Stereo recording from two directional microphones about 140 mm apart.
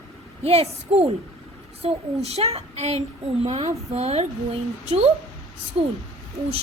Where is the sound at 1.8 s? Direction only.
45° right (ahead or behind).